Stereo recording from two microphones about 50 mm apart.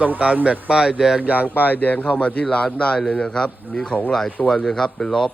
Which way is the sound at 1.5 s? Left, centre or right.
Left.